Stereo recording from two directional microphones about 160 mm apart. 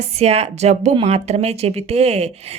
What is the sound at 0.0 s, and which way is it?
Speech, 40° right (ahead or behind).